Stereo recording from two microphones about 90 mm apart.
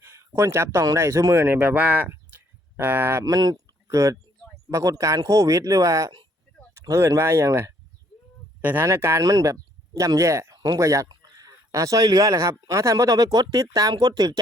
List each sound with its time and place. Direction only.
0.0 s a sound: 30° right (ahead or behind)
0.9 s speech: 35° right (ahead or behind)
1.5 s speech: 15° right (ahead or behind)
3.2 s speech: 45° right (ahead or behind)